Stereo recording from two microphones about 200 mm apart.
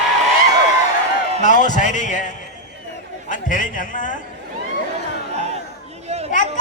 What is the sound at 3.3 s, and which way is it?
Speech, 40° left (ahead or behind).